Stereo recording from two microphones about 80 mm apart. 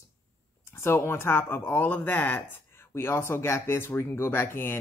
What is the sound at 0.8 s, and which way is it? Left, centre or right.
Speech, left.